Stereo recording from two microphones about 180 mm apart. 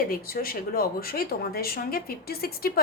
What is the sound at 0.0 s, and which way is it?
A woman's voice, 55° left (ahead or behind).